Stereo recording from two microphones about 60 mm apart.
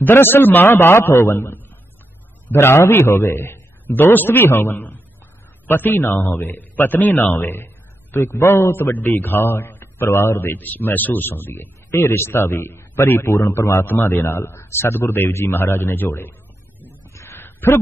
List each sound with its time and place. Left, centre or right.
0.0 s speech: left
2.5 s speech: left
3.3 s a man's voice: left
6.5 s a man's voice: left
17.1 s a sound: left
17.4 s a sound: left